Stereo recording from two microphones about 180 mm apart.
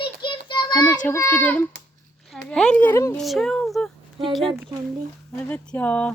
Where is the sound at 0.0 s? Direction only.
25° left (ahead or behind); by 1.6 s 10° left (ahead or behind).